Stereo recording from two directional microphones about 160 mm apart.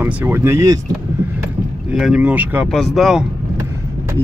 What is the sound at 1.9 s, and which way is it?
Speech, 5° right (ahead or behind).